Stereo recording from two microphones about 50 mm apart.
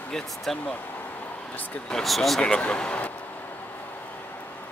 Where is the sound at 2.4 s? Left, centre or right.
Centre.